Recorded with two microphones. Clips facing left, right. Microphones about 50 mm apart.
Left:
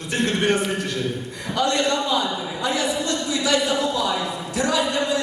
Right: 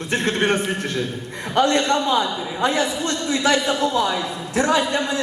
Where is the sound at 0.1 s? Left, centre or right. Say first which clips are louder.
Right 1 dB; right.